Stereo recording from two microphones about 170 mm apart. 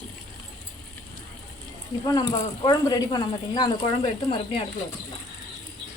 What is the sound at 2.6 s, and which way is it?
Speech, 25° left (ahead or behind).